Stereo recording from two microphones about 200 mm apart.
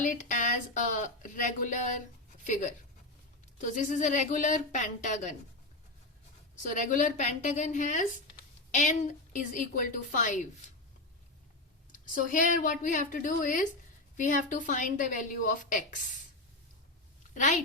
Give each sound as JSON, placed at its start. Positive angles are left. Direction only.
{"t": 0.0, "sound": "a woman's voice", "side_deg": 40}
{"t": 6.6, "sound": "a woman's voice", "side_deg": 40}
{"t": 11.9, "sound": "a sound", "side_deg": 40}
{"t": 12.6, "sound": "a woman's voice", "side_deg": 40}
{"t": 17.3, "sound": "a child's voice", "side_deg": 35}